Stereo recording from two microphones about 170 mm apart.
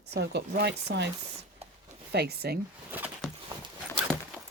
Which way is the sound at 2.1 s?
70° right (ahead or behind).